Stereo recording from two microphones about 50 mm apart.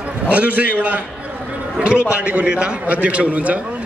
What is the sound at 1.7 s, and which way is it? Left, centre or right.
A man's voice, centre.